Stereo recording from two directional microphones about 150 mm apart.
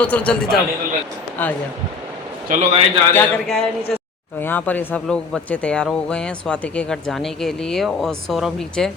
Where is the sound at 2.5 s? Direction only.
65° right (ahead or behind).